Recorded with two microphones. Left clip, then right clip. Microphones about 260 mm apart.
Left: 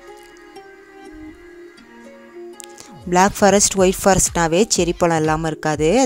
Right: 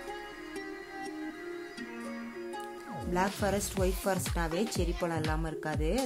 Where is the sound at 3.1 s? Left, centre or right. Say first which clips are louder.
Left 17 dB; left.